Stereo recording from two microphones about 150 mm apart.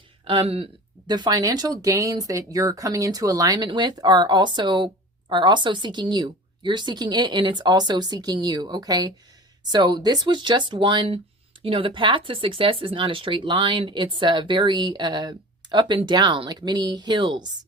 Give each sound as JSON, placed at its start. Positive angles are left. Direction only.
{"t": 0.3, "sound": "speech", "side_deg": -40}